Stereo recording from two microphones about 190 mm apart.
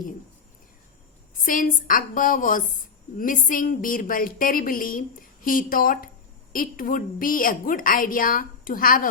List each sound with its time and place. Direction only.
1.4 s a woman's voice: 45° left (ahead or behind)